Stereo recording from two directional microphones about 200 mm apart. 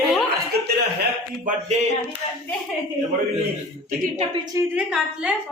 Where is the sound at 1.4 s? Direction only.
35° right (ahead or behind).